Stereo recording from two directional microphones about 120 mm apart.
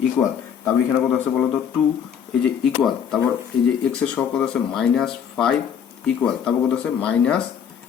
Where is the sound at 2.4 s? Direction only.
Centre (ahead or behind).